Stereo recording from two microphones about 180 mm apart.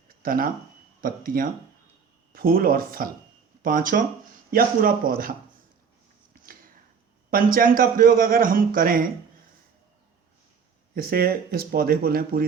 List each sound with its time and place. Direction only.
0.2 s a man's voice: 55° right (ahead or behind)
7.3 s a man's voice: 55° right (ahead or behind)
10.9 s speech: 55° right (ahead or behind)